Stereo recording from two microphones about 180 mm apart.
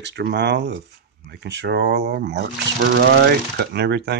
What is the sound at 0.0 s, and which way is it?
Speech, 70° right (ahead or behind).